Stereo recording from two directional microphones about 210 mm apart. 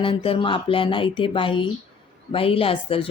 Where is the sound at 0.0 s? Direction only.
25° left (ahead or behind).